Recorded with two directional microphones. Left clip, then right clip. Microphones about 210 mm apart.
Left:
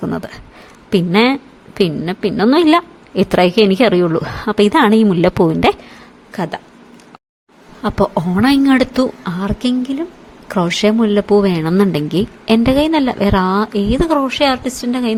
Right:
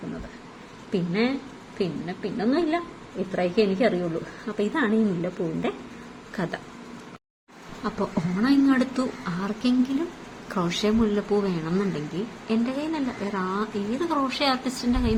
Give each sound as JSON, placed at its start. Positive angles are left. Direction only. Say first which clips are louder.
{"t": 0.9, "sound": "a woman's voice", "louder": "left 13 dB", "side_deg": 60}
{"t": 6.3, "sound": "speech", "louder": "left 9 dB", "side_deg": 35}
{"t": 7.9, "sound": "speech", "louder": "left 13 dB", "side_deg": 40}